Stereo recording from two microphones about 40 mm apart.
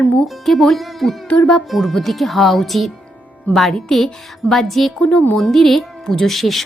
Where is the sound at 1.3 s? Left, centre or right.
Left.